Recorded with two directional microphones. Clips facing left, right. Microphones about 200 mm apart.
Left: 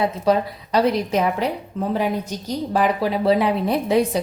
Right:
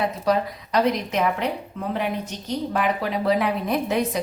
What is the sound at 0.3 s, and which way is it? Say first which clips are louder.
A woman's voice: left 3 dB; 30° left (ahead or behind).